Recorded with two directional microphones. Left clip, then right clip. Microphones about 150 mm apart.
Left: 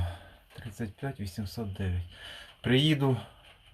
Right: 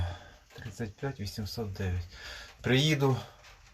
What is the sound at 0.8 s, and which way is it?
Speech, 15° left (ahead or behind).